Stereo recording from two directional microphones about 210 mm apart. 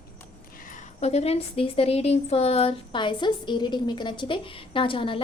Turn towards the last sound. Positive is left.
turn(degrees=25)  # may be behind; listen again after turning